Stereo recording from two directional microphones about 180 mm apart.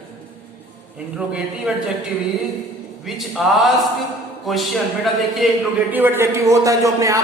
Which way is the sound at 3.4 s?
Centre (ahead or behind).